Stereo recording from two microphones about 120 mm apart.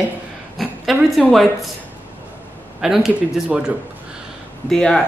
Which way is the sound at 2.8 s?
5° right (ahead or behind).